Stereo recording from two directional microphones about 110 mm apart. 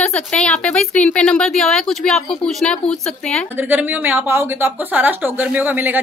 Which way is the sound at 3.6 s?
15° right (ahead or behind).